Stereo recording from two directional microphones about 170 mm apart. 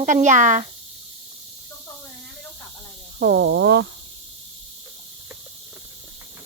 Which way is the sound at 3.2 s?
75° right (ahead or behind).